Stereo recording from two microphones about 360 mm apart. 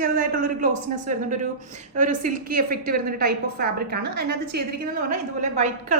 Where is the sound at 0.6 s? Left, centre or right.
Right.